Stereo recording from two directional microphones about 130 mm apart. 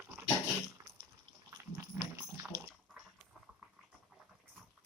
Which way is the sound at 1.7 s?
25° right (ahead or behind).